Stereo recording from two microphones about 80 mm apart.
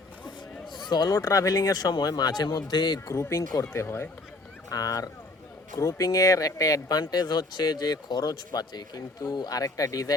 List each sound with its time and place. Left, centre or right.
0.8 s speech: left
1.2 s speech: left
3.1 s speech: left
4.7 s speech: left